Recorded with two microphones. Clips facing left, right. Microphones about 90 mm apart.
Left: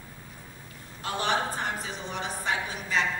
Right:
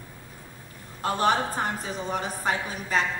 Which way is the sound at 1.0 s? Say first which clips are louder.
Right 5 dB; 45° right (ahead or behind).